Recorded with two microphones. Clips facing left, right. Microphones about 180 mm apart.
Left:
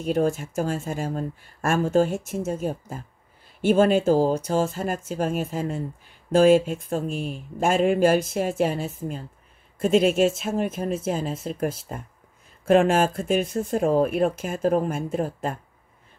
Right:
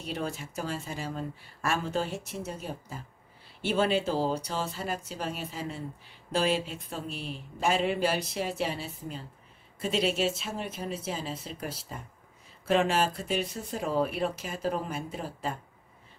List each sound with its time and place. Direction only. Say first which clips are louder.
0.0 s speech: left 12 dB; 45° left (ahead or behind)